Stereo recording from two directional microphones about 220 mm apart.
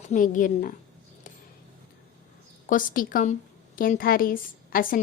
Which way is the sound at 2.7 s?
40° left (ahead or behind).